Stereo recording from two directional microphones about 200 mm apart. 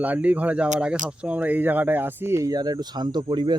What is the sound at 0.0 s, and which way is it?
Speech, 10° right (ahead or behind).